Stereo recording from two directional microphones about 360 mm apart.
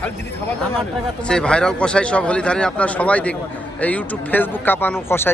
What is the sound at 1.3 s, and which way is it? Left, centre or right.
Speech, centre.